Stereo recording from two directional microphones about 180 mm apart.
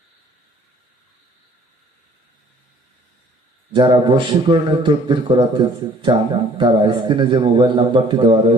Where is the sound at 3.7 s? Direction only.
25° right (ahead or behind).